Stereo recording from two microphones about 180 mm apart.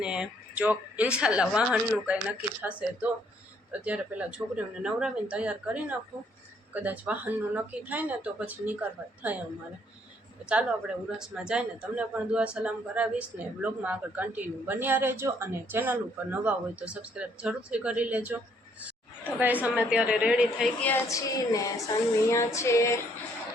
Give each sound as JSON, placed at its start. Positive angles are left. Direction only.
{"t": 0.0, "sound": "a woman's voice", "side_deg": -5}
{"t": 10.5, "sound": "a woman's voice", "side_deg": -5}
{"t": 19.6, "sound": "a woman's voice", "side_deg": -5}
{"t": 20.8, "sound": "a woman's voice", "side_deg": 15}